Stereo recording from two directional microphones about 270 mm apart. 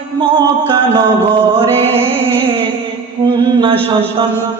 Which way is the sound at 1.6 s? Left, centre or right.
Right.